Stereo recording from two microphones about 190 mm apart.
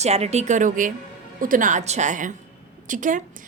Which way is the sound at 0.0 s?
35° right (ahead or behind).